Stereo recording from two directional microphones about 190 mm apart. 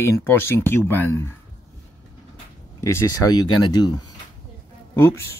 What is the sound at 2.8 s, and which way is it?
Speech, 15° left (ahead or behind).